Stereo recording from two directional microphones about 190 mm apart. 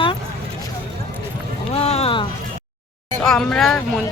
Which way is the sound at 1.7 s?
30° left (ahead or behind).